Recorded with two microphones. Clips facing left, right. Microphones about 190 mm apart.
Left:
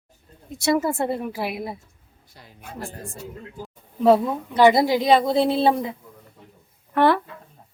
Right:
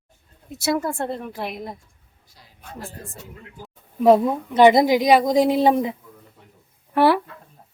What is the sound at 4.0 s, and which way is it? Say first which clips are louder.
A woman's voice: right 2 dB; 15° right (ahead or behind).